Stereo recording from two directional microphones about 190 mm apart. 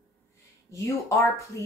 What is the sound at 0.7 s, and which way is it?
Speech, 15° left (ahead or behind).